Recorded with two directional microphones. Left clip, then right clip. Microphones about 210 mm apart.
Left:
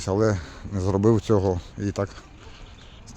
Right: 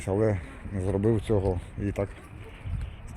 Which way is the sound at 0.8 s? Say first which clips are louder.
Left 5 dB; 40° left (ahead or behind).